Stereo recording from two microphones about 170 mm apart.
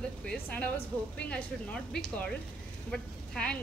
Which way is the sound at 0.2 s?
5° left (ahead or behind).